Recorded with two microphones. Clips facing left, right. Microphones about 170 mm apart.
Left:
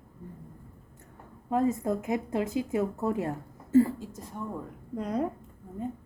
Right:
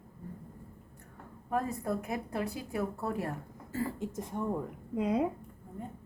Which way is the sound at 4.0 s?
20° right (ahead or behind).